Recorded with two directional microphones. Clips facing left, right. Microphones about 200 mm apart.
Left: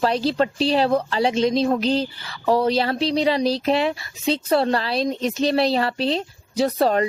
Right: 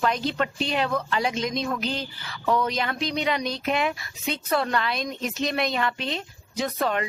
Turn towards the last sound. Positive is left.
turn(degrees=35)  # may be behind; listen again after turning